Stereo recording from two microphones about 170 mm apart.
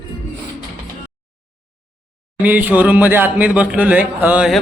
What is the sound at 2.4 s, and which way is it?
A man's voice, 10° right (ahead or behind).